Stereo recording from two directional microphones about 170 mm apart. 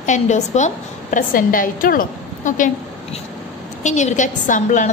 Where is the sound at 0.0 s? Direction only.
45° left (ahead or behind).